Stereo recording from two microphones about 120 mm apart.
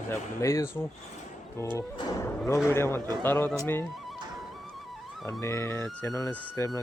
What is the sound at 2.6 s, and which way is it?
Speech, 20° left (ahead or behind).